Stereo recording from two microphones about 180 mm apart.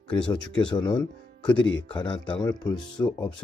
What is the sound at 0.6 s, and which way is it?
Speech, 25° left (ahead or behind).